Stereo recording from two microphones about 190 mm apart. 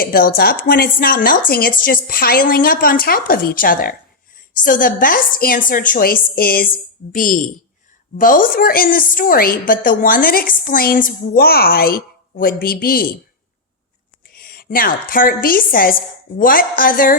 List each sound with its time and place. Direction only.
0.0 s a woman's voice: 50° left (ahead or behind)
14.3 s a woman's voice: 50° left (ahead or behind)